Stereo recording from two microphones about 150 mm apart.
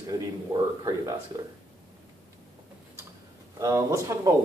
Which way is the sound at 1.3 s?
20° right (ahead or behind).